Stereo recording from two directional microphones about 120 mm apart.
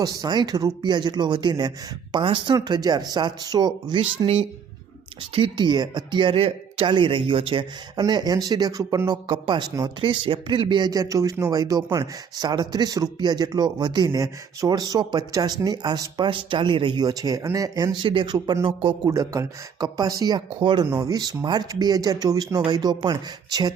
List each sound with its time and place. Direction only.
0.0 s a man's voice: 30° right (ahead or behind)
19.1 s speech: 25° right (ahead or behind); by 20.8 s 40° right (ahead or behind)
20.8 s speech: 25° right (ahead or behind)